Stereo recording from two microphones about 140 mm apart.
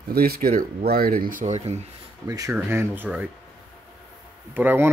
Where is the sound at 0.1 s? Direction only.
90° right.